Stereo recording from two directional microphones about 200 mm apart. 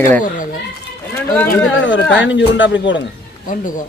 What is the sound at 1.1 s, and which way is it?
Run, 15° left (ahead or behind).